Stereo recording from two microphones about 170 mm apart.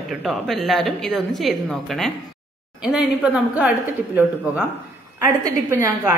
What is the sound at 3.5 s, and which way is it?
A woman's voice, 10° right (ahead or behind).